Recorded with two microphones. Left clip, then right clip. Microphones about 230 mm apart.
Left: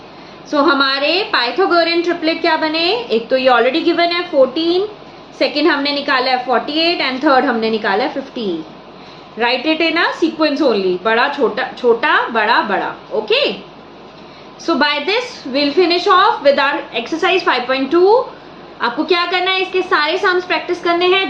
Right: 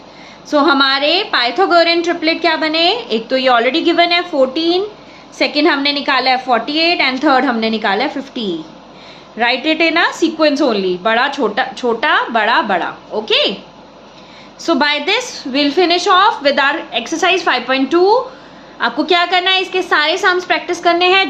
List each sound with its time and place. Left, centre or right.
0.5 s a woman's voice: right
14.6 s a woman's voice: right